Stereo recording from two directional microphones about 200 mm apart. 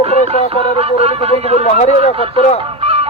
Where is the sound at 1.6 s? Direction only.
35° left (ahead or behind).